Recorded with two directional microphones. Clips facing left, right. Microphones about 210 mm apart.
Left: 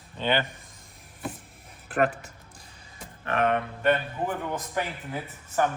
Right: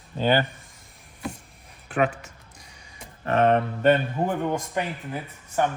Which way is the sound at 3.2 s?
35° right (ahead or behind).